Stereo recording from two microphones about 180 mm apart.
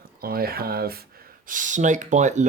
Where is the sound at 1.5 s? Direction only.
45° right (ahead or behind).